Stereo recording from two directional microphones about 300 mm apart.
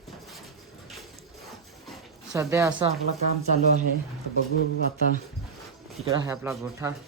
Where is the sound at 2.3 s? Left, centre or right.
Centre.